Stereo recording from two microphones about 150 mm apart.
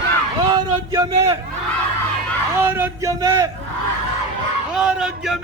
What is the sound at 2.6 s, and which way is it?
Speech, 15° right (ahead or behind).